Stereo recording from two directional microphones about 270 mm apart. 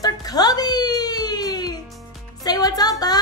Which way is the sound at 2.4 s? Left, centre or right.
Centre.